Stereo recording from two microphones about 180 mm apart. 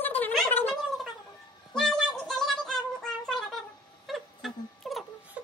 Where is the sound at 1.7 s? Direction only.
Centre (ahead or behind).